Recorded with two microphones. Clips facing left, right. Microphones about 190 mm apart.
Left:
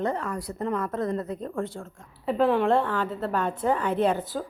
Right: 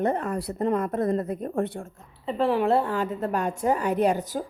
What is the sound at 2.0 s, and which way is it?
A woman's voice, centre (ahead or behind).